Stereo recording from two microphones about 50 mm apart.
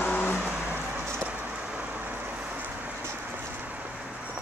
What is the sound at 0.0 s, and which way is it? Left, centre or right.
Vehicle, left.